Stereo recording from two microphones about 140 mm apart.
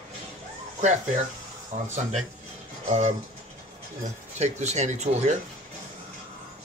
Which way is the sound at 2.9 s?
50° right (ahead or behind).